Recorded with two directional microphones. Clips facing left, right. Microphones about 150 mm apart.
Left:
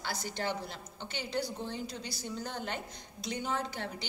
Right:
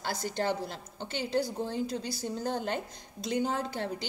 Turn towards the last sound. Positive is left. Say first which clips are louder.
# right 4 dB
turn(degrees=-40)  # may be behind; listen again after turning